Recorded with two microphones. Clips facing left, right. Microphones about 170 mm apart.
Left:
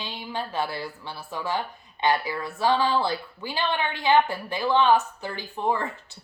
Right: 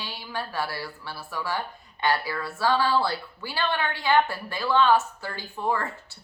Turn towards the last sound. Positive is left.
turn(degrees=20)  # may be behind; listen again after turning